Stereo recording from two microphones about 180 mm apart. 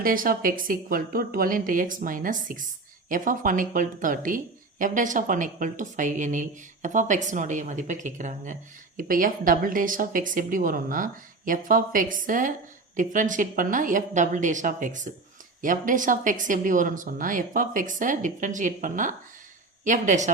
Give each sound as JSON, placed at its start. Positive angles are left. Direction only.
{"t": 0.0, "sound": "speech", "side_deg": -50}